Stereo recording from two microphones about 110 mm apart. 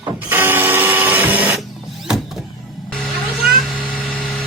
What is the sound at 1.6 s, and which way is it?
Vehicle, centre (ahead or behind).